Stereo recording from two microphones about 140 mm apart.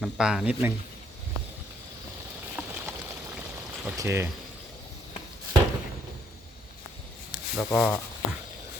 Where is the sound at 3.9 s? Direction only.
20° right (ahead or behind).